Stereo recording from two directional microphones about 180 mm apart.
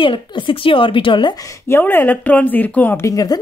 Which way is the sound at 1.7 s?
10° left (ahead or behind).